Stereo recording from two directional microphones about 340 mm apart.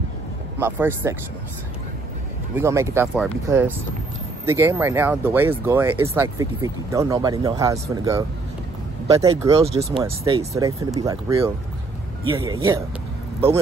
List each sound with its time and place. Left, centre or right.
0.6 s speech: centre
2.5 s speech: centre